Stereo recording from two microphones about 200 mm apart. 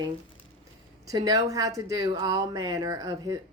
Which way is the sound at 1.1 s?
20° right (ahead or behind).